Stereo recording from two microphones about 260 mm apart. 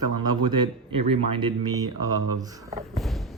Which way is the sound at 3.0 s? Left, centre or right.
Centre.